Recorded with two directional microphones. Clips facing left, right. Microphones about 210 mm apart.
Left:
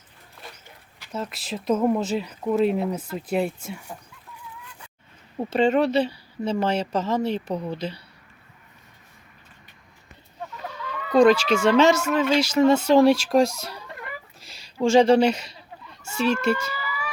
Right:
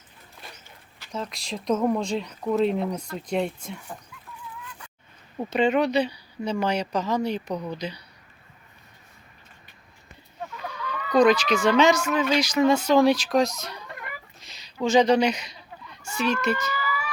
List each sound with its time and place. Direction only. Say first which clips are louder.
0.9 s speech: left 1 dB; 5° left (ahead or behind)
5.5 s speech: left 2 dB; 25° left (ahead or behind)
10.7 s speech: left 1 dB; 25° left (ahead or behind)
14.8 s speech: left 3 dB; 30° left (ahead or behind)
15.9 s chicken: left 2 dB; 25° left (ahead or behind)
16.3 s speech: left 2 dB; 30° left (ahead or behind)